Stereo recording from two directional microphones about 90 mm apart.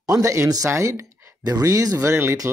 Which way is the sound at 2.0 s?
25° right (ahead or behind).